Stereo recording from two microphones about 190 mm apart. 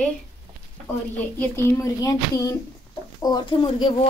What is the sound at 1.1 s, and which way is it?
Speech, 10° left (ahead or behind).